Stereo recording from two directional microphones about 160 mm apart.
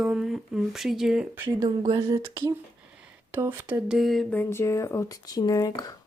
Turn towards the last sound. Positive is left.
turn(degrees=25)  # may be behind; listen again after turning